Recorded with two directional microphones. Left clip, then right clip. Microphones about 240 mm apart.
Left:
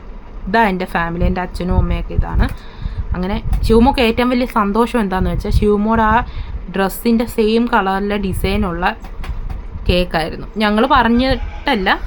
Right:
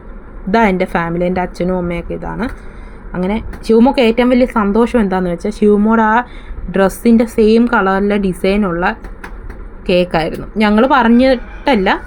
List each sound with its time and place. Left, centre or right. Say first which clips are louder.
0.5 s a woman's voice: right 2 dB; centre